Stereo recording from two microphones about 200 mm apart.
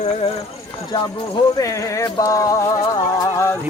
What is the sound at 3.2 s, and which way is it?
Music, 15° left (ahead or behind).